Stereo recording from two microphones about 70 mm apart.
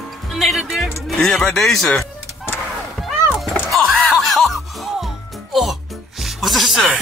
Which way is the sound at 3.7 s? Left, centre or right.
Centre.